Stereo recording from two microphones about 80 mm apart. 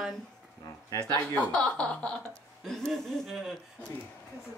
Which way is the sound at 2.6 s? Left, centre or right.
Centre.